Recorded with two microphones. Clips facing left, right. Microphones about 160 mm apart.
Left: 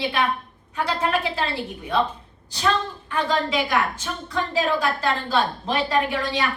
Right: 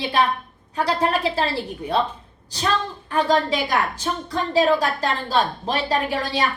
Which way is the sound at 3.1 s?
40° right (ahead or behind).